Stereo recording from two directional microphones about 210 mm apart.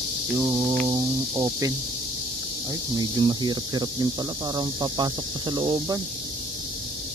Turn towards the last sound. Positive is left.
turn(degrees=-20)  # may be behind; listen again after turning